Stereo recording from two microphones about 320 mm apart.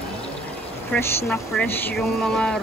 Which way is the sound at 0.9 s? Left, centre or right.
Centre.